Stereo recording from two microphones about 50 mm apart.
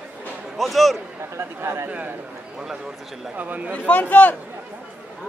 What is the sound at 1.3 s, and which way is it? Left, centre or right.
Speech, right.